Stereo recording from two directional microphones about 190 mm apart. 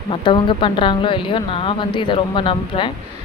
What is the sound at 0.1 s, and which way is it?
Speech, 25° left (ahead or behind).